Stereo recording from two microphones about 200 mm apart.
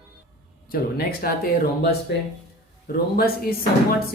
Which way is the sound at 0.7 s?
45° left (ahead or behind).